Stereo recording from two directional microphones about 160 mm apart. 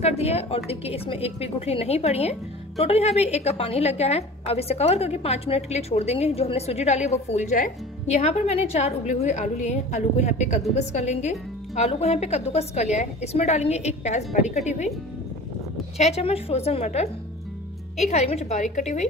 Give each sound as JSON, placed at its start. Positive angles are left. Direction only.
{"t": 0.0, "sound": "a woman's voice", "side_deg": 40}
{"t": 16.0, "sound": "a woman's voice", "side_deg": 40}